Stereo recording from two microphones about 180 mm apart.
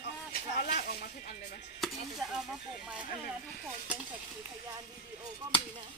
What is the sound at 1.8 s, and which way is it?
Chopping, centre (ahead or behind).